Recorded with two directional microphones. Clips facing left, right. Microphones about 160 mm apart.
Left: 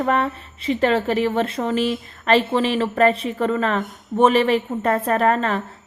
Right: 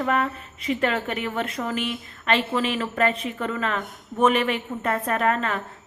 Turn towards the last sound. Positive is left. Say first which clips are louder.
# left 5 dB
turn(degrees=35)  # may be behind; listen again after turning